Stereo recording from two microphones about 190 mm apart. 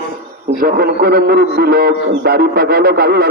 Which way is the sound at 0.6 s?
55° right (ahead or behind).